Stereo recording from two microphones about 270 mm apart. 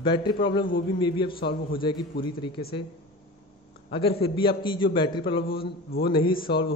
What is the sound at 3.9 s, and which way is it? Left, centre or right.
A man's voice, left.